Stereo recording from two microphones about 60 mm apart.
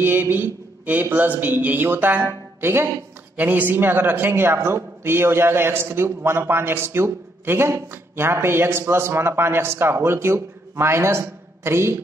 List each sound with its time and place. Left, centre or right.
0.0 s a man's voice: right
3.3 s a man's voice: right